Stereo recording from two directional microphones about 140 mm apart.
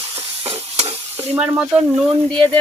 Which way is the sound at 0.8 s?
45° right (ahead or behind).